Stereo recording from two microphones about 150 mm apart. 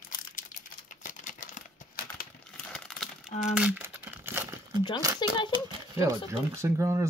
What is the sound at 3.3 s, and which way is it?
Crumpling, 50° left (ahead or behind).